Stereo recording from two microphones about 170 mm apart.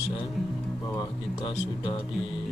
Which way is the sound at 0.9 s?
30° left (ahead or behind).